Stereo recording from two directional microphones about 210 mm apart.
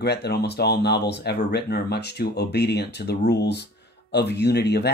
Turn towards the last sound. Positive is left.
turn(degrees=50)  # may be behind; listen again after turning